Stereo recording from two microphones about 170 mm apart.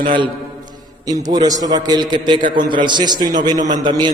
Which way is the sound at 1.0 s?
20° right (ahead or behind).